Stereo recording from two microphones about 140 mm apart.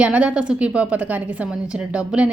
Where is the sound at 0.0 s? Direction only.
10° right (ahead or behind).